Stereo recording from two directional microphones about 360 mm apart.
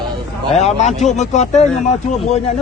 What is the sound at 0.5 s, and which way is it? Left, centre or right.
Speech, centre.